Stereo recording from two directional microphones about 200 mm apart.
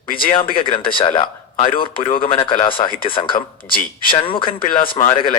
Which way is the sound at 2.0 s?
45° left (ahead or behind).